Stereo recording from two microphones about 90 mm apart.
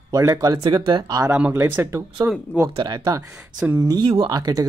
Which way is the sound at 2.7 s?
60° right (ahead or behind).